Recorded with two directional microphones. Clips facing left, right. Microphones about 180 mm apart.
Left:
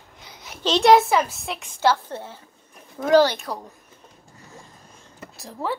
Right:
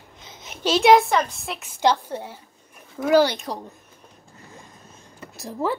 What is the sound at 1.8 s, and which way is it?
A woman's voice, 15° right (ahead or behind).